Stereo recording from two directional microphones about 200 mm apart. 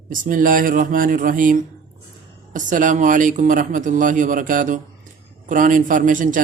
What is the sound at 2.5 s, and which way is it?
A man's voice, 40° right (ahead or behind).